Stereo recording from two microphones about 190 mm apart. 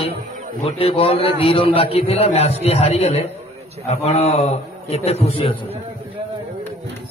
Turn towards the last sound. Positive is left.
turn(degrees=30)  # may be behind; listen again after turning